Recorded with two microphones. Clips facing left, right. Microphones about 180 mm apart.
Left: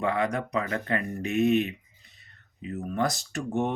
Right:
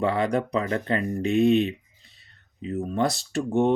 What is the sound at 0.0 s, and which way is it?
Speech, 30° right (ahead or behind).